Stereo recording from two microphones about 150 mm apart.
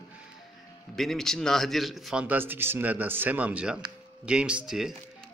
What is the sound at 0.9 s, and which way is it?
A man's voice, centre (ahead or behind).